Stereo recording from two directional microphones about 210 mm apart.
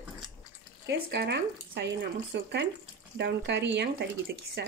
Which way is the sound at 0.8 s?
55° right (ahead or behind).